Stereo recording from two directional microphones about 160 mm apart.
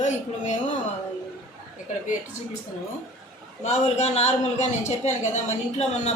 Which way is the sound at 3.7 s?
45° left (ahead or behind).